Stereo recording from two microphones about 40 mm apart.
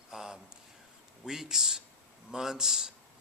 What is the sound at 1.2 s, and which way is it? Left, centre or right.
A man's voice, centre.